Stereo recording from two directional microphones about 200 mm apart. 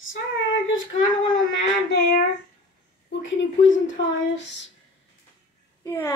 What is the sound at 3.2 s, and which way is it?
Speech, 70° left (ahead or behind).